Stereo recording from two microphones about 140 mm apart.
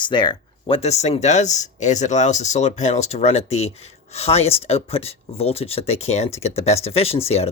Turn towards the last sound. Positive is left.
turn(degrees=45)  # may be behind; listen again after turning